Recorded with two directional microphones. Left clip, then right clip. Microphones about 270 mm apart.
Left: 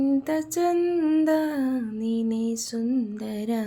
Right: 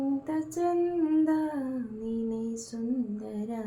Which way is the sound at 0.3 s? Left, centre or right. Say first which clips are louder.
Left 5 dB; left.